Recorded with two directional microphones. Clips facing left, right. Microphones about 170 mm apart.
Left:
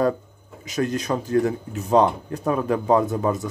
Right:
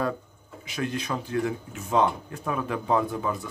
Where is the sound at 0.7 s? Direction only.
40° left (ahead or behind).